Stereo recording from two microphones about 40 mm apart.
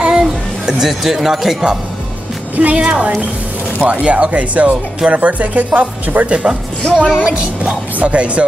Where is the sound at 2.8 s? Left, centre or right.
Right.